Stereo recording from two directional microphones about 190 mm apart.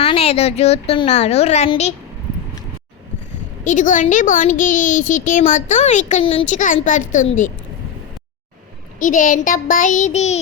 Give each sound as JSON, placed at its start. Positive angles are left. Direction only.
{"t": 0.0, "sound": "a woman's voice", "side_deg": 30}
{"t": 3.6, "sound": "a child's voice", "side_deg": 40}
{"t": 9.0, "sound": "a child's voice", "side_deg": 45}